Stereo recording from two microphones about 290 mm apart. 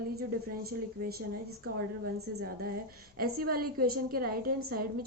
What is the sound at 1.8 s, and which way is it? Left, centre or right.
A woman's voice, right.